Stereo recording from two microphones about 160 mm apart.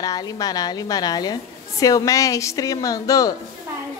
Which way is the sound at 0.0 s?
25° left (ahead or behind).